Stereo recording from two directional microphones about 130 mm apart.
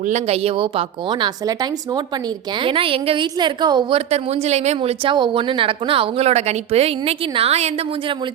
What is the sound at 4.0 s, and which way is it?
Speech, 50° right (ahead or behind).